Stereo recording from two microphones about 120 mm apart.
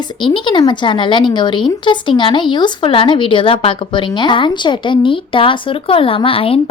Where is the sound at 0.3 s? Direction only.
40° left (ahead or behind).